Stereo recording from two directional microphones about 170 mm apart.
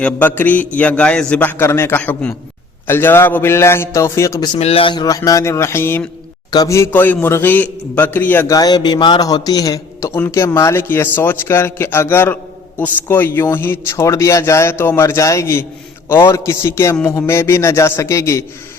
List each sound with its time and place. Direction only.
0.0 s a man's voice: 10° left (ahead or behind)